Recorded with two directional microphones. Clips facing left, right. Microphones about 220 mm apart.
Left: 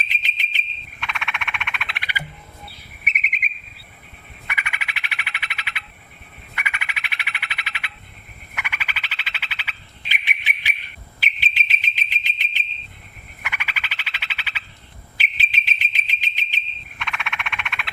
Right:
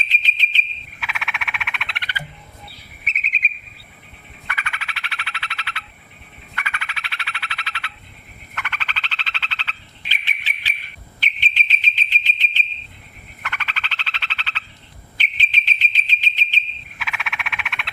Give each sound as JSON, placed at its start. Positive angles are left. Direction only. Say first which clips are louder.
{"t": 0.1, "sound": "whistle", "louder": "right 3 dB", "side_deg": 15}
{"t": 0.9, "sound": "frog", "louder": "even", "side_deg": -5}
{"t": 3.0, "sound": "chirp", "louder": "left 1 dB", "side_deg": 15}
{"t": 4.4, "sound": "frog", "louder": "right 1 dB", "side_deg": 15}
{"t": 11.2, "sound": "bird", "louder": "even", "side_deg": 10}
{"t": 13.4, "sound": "frog", "louder": "right 2 dB", "side_deg": 10}
{"t": 15.2, "sound": "bird", "louder": "even", "side_deg": 10}
{"t": 17.0, "sound": "frog", "louder": "even", "side_deg": -5}